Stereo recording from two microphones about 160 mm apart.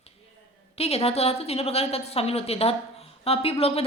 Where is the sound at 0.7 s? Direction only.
40° left (ahead or behind).